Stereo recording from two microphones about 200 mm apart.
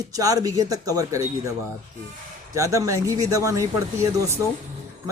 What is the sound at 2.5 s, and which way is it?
Speech, 15° right (ahead or behind).